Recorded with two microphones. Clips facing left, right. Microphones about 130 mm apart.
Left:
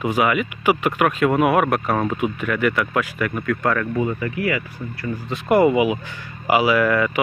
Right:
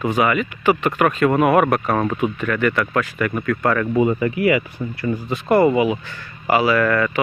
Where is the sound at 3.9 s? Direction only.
20° right (ahead or behind).